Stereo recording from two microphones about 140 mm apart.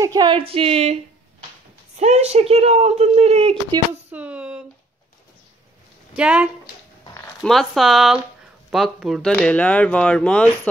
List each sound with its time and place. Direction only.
0.0 s speech: 30° right (ahead or behind)
0.4 s speech: 40° right (ahead or behind)
4.1 s speech: 10° right (ahead or behind)
6.1 s speech: 10° right (ahead or behind); by 10.7 s 10° left (ahead or behind)